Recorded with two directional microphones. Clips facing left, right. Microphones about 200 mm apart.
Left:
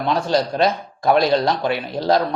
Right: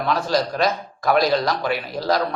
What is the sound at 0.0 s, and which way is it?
Speech, 25° left (ahead or behind).